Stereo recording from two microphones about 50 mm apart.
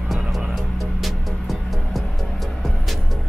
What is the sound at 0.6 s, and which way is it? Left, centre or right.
Music, centre.